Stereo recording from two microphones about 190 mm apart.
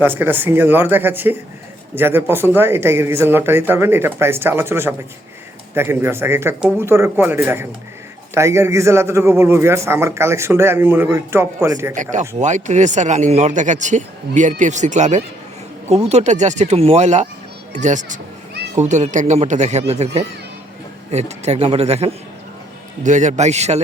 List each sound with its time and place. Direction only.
0.0 s a man's voice: 10° right (ahead or behind)
12.4 s a man's voice: 40° right (ahead or behind)
21.1 s a man's voice: 35° right (ahead or behind)